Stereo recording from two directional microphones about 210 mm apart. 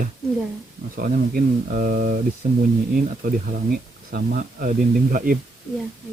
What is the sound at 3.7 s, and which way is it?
Speech, 45° right (ahead or behind).